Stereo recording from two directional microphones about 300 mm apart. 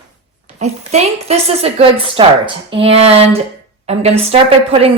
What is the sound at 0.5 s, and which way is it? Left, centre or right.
A woman's voice, right.